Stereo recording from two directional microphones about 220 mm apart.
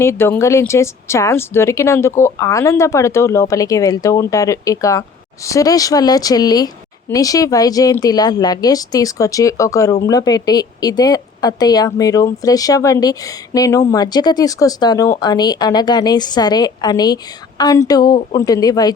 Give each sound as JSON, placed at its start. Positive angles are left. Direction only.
{"t": 0.0, "sound": "a woman's voice", "side_deg": 10}